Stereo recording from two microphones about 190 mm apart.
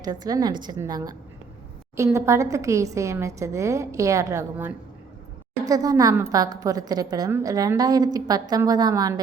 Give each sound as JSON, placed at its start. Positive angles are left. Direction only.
{"t": 0.0, "sound": "a woman's voice", "side_deg": -20}